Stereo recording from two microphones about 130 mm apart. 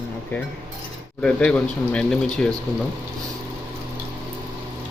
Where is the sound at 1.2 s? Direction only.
10° left (ahead or behind).